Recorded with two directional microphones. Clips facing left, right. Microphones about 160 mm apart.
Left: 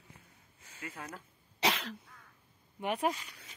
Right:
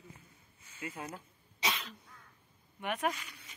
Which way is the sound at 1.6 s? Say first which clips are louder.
Left 5 dB; 75° left (ahead or behind).